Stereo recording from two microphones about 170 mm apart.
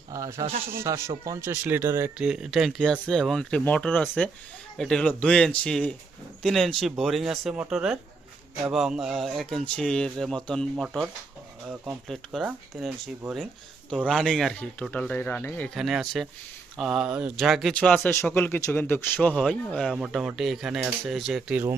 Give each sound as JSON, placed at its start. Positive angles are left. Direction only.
{"t": 0.1, "sound": "speech", "side_deg": -20}
{"t": 2.2, "sound": "speech", "side_deg": -5}
{"t": 13.9, "sound": "speech", "side_deg": 0}
{"t": 15.7, "sound": "speech", "side_deg": 0}